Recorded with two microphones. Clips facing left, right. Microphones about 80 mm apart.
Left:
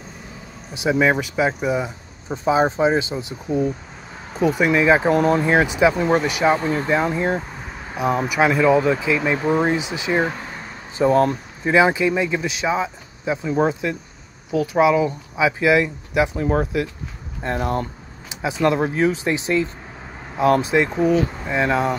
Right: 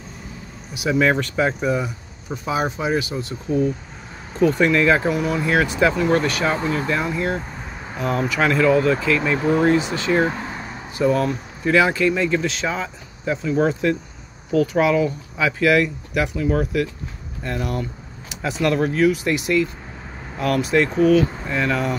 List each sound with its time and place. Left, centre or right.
0.7 s speech: centre
5.0 s speech: left
5.4 s speech: left
11.0 s speech: left
11.6 s speech: left
16.3 s speech: left
18.3 s speech: centre